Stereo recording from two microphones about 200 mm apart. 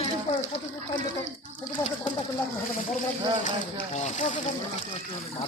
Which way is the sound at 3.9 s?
35° left (ahead or behind).